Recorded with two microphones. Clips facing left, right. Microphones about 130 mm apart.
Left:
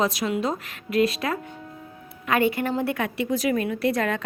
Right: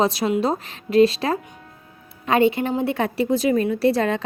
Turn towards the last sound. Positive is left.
turn(degrees=-30)  # may be behind; listen again after turning